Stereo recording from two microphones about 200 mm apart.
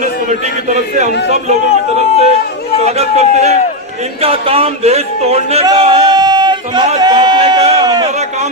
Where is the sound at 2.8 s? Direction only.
30° right (ahead or behind).